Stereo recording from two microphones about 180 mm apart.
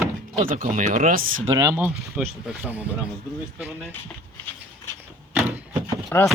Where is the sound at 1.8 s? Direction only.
5° right (ahead or behind).